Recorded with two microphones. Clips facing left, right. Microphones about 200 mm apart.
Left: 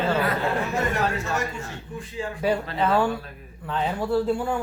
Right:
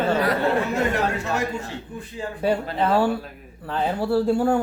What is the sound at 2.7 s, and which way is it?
Speech, 30° right (ahead or behind).